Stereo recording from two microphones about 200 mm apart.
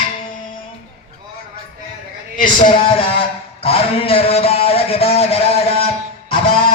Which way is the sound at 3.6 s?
30° left (ahead or behind).